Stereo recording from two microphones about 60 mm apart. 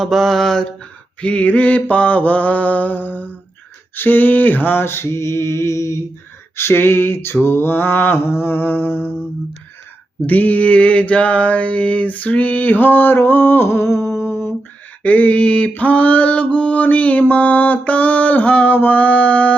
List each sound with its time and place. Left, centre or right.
0.0 s mantra: centre; by 6.0 s left
6.6 s a sound: left
7.4 s mantra: left
10.2 s mantra: left
13.7 s a sound: left
15.0 s mantra: left